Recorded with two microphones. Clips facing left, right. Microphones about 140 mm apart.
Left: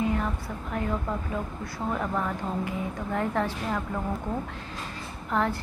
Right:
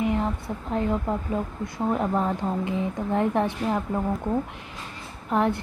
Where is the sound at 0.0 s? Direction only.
25° right (ahead or behind).